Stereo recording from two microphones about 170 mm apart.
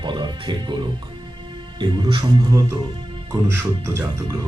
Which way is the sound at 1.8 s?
25° right (ahead or behind).